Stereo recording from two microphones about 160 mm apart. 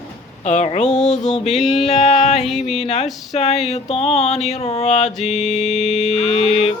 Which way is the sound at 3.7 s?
40° left (ahead or behind).